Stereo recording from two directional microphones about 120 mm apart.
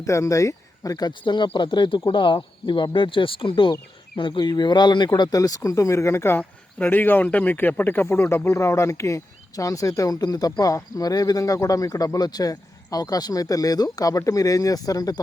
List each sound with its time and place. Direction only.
0.0 s speech: 25° left (ahead or behind)